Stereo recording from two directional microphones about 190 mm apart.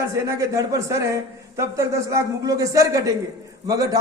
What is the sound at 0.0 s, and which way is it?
A man's voice, 15° right (ahead or behind).